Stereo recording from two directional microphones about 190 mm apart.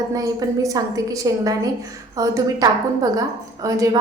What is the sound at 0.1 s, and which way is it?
A woman's voice, 20° right (ahead or behind).